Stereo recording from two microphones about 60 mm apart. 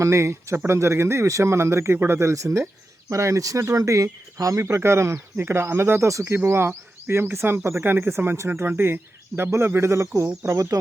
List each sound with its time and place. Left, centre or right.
0.0 s speech: right
4.6 s speech: right
6.1 s speech: right
6.3 s speech: right
10.4 s speech: right